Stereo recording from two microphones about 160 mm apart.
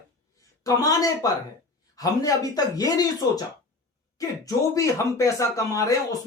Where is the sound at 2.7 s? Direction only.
20° left (ahead or behind).